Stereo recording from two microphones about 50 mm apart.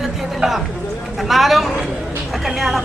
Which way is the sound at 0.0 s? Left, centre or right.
Centre.